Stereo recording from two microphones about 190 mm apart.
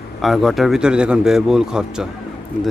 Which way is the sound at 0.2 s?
Centre (ahead or behind).